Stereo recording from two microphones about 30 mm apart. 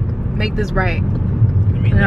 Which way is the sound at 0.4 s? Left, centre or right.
Centre.